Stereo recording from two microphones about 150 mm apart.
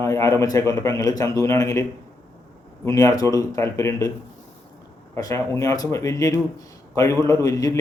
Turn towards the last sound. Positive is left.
turn(degrees=20)  # may be behind; listen again after turning